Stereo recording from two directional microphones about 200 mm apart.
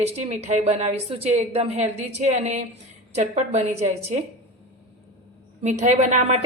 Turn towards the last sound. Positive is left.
turn(degrees=-35)  # may be behind; listen again after turning